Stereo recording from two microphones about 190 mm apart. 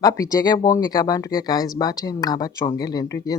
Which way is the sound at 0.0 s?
15° left (ahead or behind).